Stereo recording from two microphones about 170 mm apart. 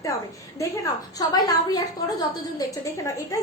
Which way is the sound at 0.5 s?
20° left (ahead or behind).